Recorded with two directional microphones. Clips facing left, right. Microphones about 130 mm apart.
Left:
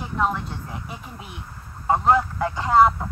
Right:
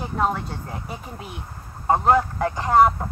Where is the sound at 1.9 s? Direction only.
40° right (ahead or behind).